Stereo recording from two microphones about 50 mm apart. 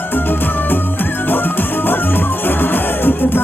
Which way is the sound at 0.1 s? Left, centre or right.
Left.